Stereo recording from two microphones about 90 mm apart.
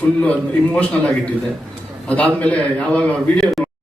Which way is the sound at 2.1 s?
15° left (ahead or behind).